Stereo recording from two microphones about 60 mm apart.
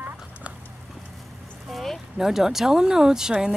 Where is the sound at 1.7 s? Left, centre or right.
Centre.